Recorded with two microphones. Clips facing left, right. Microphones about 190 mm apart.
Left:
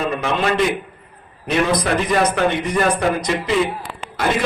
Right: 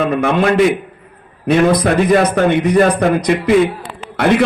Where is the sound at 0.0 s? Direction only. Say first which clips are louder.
Right 6 dB; 50° right (ahead or behind).